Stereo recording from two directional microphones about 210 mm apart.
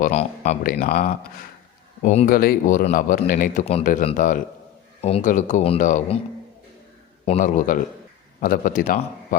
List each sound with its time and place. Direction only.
0.0 s a man's voice: 30° left (ahead or behind)
4.9 s a man's voice: 30° left (ahead or behind)
7.3 s a man's voice: 35° left (ahead or behind)